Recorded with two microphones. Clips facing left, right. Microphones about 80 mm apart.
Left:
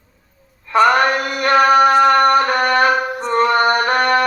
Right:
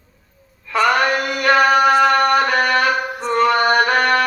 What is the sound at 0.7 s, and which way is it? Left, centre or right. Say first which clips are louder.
Chant: left 3 dB; left.